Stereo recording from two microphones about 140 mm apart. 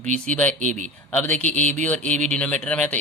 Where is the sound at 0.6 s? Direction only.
60° right (ahead or behind).